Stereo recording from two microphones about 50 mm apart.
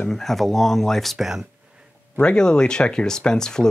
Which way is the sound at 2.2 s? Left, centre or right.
Centre.